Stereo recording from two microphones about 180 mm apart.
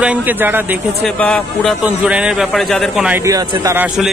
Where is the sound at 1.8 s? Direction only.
5° right (ahead or behind).